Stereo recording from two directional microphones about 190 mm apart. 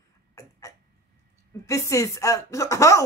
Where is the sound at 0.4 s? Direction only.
15° left (ahead or behind).